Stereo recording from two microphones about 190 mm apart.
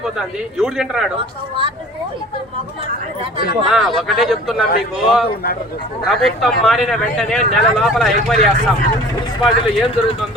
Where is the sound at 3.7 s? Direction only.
Centre (ahead or behind).